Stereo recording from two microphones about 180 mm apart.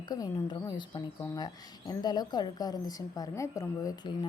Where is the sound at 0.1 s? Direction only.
25° left (ahead or behind).